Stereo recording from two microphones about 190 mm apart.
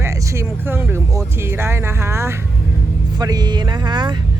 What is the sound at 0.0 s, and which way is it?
Speech, 15° right (ahead or behind).